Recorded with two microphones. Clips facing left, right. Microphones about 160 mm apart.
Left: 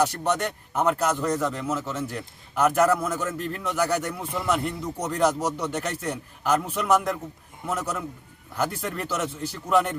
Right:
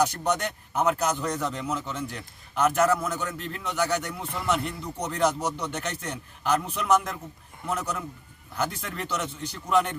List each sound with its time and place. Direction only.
0.0 s a man's voice: centre (ahead or behind)